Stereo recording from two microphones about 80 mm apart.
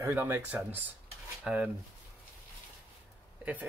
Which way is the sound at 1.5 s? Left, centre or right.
Centre.